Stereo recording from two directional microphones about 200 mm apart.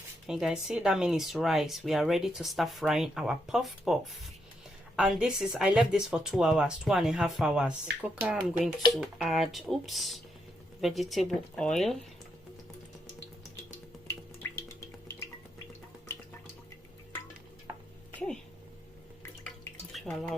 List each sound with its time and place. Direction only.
0.3 s speech: 5° right (ahead or behind)
14.4 s music: 15° left (ahead or behind)
19.5 s drip: centre (ahead or behind)